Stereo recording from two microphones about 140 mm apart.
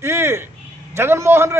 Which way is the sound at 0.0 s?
15° right (ahead or behind).